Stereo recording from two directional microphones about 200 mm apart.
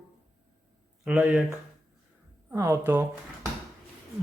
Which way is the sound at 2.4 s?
10° right (ahead or behind).